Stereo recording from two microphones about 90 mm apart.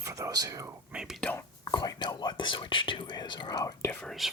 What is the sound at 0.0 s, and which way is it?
Whispering, 35° right (ahead or behind).